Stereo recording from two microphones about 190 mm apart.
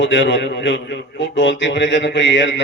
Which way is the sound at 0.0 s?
70° left (ahead or behind).